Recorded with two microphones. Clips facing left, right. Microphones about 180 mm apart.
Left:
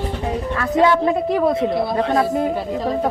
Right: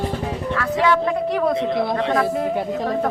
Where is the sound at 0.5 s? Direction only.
30° left (ahead or behind).